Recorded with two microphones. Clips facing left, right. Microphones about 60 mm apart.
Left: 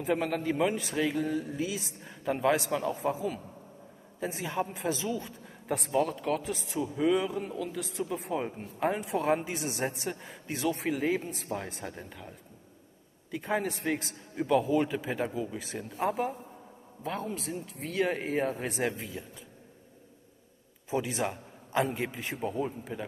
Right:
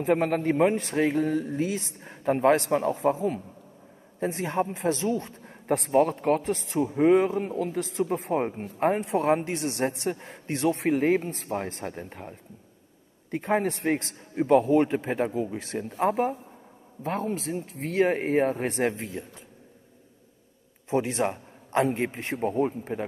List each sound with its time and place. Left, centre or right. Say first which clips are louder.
0.0 s a man's voice: right 6 dB; right
4.8 s speech: right 7 dB; right
5.2 s a sound: right 2 dB; right
5.8 s a man's voice: right 6 dB; right
9.1 s speech: right 3 dB; right
9.4 s speech: right 5 dB; right
10.1 s speech: right 5 dB; right
10.7 s a man's voice: right 6 dB; right
14.3 s speech: right 6 dB; right
16.0 s a man's voice: right 5 dB; right
20.9 s a man's voice: right 5 dB; right
22.4 s a man's voice: right 7 dB; right